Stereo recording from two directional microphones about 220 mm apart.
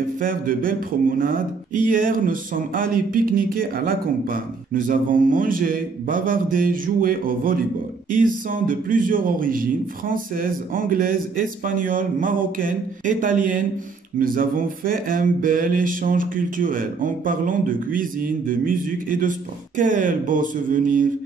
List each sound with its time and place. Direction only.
0.2 s speech: 40° right (ahead or behind)